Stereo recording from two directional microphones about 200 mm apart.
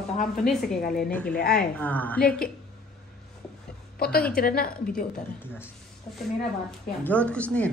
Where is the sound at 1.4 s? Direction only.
50° left (ahead or behind).